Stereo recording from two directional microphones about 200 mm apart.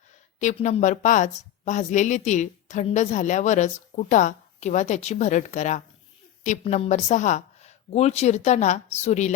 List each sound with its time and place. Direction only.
0.3 s a woman's voice: 35° left (ahead or behind)